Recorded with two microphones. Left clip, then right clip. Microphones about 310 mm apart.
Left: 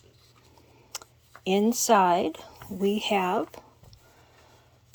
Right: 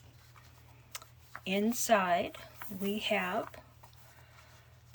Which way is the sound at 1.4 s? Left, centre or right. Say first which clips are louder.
Left 9 dB; centre.